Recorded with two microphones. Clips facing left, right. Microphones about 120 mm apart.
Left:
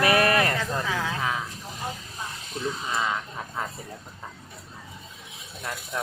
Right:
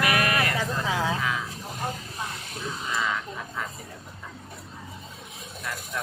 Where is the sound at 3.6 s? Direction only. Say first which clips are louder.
Left 3 dB; 30° left (ahead or behind).